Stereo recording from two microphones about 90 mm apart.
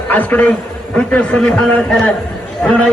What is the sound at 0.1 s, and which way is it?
A man's voice, 20° left (ahead or behind).